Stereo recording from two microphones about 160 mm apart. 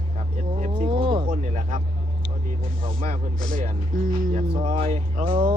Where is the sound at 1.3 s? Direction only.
50° right (ahead or behind).